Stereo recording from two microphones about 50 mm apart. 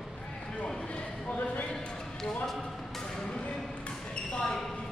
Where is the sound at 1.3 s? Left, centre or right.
Left.